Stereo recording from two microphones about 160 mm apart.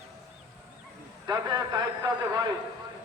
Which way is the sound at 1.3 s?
25° right (ahead or behind).